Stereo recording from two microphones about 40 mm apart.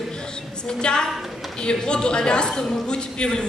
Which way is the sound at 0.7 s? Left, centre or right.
Centre.